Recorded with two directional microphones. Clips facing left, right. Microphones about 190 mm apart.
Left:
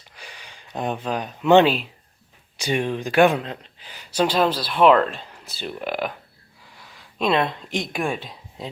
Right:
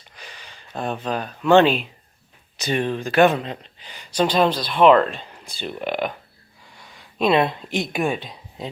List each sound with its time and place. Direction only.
0.2 s speech: 10° left (ahead or behind)
1.6 s speech: centre (ahead or behind)